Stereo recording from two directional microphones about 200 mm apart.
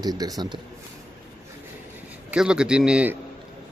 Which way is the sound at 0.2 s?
20° right (ahead or behind).